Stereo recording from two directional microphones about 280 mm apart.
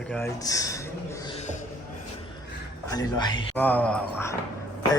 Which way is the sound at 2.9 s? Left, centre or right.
Centre.